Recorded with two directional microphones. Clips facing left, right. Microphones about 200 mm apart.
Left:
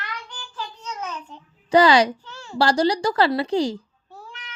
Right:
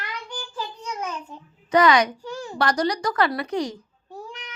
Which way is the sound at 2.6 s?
30° left (ahead or behind).